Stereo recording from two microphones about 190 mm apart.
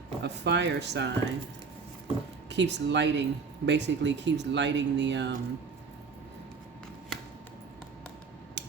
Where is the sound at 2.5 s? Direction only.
65° right (ahead or behind).